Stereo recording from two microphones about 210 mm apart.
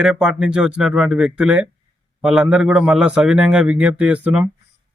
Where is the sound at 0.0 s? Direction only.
5° right (ahead or behind).